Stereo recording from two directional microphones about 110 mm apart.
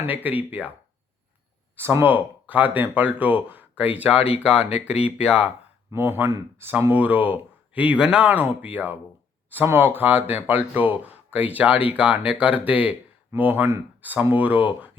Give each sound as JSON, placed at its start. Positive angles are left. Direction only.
{"t": 0.0, "sound": "speech", "side_deg": -15}
{"t": 1.7, "sound": "speech", "side_deg": -20}
{"t": 5.9, "sound": "speech", "side_deg": -20}